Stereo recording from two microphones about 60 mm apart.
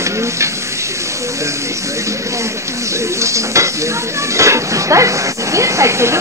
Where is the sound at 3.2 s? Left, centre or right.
Right.